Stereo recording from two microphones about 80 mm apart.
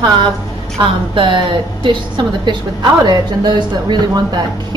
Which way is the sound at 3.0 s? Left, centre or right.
Right.